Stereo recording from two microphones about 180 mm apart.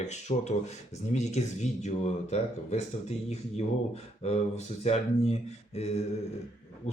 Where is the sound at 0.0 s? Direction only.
40° left (ahead or behind).